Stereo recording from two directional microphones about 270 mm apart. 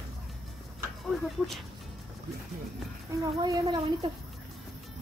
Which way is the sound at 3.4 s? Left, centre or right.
Centre.